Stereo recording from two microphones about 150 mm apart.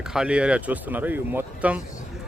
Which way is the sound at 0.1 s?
5° right (ahead or behind).